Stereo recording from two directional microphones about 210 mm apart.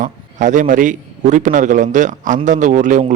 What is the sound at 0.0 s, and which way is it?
A man's voice, 35° right (ahead or behind).